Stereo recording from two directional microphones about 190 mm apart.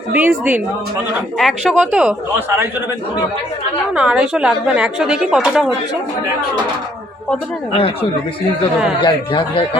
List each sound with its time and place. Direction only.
0.1 s a woman's voice: 5° right (ahead or behind)
3.9 s a woman's voice: 5° right (ahead or behind)
7.7 s speech: 30° left (ahead or behind)
9.0 s speech: 25° left (ahead or behind)